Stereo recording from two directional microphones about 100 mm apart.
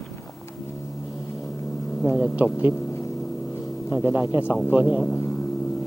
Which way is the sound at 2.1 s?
15° right (ahead or behind).